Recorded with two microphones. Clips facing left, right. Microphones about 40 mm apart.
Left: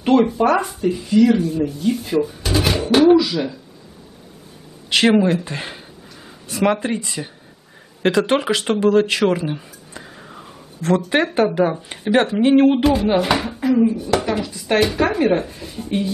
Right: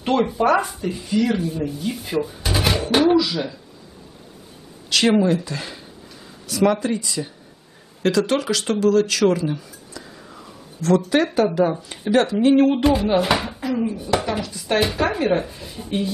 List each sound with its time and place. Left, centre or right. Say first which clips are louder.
0.0 s speech: left 4 dB; centre
4.8 s a sound: left 3 dB; left
5.2 s speech: left 1 dB; left
13.0 s speech: left 1 dB; centre
14.0 s a sound: left 2 dB; centre
14.4 s speech: left 3 dB; centre